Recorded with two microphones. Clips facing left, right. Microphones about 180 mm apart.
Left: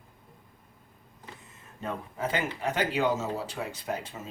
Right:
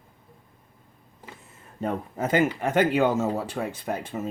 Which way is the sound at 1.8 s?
45° right (ahead or behind).